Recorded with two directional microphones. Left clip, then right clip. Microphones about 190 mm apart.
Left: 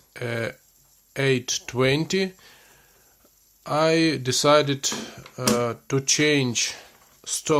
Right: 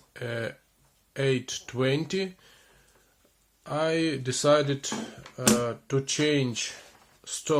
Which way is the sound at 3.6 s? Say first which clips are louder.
Left 6 dB; 35° left (ahead or behind).